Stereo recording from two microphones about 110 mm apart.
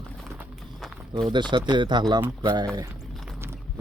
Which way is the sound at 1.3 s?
45° right (ahead or behind).